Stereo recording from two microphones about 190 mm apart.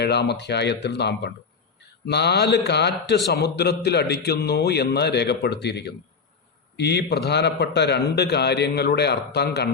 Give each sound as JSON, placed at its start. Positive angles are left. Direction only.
{"t": 0.0, "sound": "a man's voice", "side_deg": 60}